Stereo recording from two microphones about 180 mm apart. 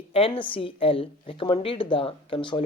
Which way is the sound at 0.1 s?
30° left (ahead or behind).